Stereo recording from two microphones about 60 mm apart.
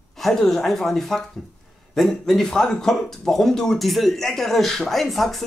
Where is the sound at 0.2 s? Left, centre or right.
Centre.